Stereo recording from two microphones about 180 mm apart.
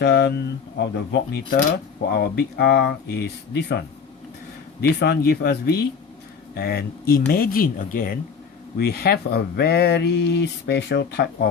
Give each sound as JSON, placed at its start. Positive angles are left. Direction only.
{"t": 0.0, "sound": "speech", "side_deg": 65}